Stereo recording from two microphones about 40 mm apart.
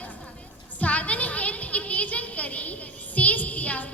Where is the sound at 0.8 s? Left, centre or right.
Left.